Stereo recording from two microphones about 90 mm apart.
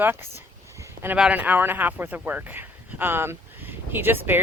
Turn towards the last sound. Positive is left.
turn(degrees=-25)  # may be behind; listen again after turning